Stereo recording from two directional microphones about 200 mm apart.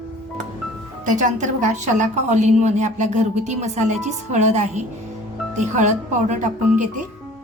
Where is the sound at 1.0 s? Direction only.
40° right (ahead or behind).